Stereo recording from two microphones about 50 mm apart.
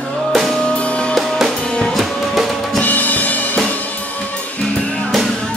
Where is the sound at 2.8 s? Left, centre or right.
Left.